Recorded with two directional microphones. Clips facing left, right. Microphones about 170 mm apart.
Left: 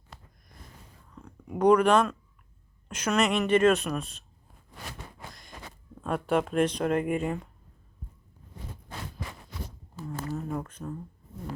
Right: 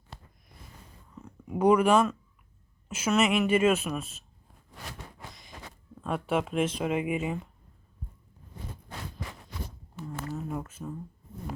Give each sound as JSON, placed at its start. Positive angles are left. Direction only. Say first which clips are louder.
{"t": 0.1, "sound": "a sound", "louder": "right 2 dB", "side_deg": -30}
{"t": 1.1, "sound": "speech", "louder": "right 2 dB", "side_deg": -5}
{"t": 6.0, "sound": "speech", "louder": "left 2 dB", "side_deg": 0}
{"t": 10.3, "sound": "speech", "louder": "left 2 dB", "side_deg": -5}